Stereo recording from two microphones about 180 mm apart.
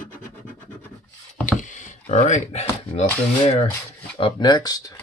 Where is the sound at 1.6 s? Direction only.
45° left (ahead or behind).